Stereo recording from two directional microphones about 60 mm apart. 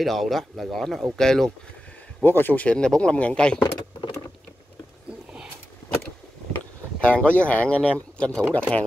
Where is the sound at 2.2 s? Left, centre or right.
Left; by 3.6 s centre.